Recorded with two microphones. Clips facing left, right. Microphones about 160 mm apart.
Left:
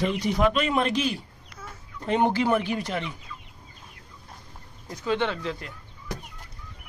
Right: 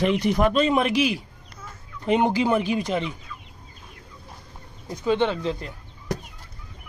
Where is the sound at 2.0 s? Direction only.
15° right (ahead or behind).